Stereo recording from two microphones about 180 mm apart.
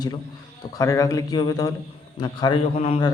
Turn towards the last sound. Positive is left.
turn(degrees=30)  # may be behind; listen again after turning